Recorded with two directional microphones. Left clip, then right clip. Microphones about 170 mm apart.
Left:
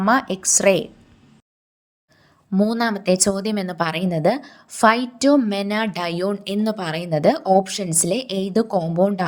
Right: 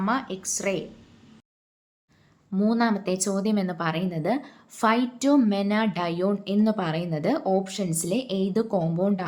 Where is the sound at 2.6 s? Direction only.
45° left (ahead or behind).